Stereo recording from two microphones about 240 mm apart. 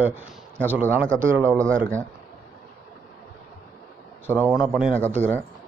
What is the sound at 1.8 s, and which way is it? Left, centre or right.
Speech, right.